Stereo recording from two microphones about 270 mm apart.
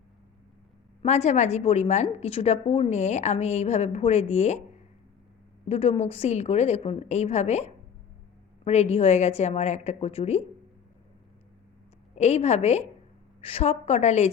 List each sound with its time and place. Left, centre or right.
1.0 s a woman's voice: left
5.6 s a woman's voice: left
12.1 s a woman's voice: left